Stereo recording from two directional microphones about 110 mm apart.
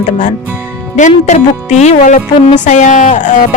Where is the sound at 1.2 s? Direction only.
90° left.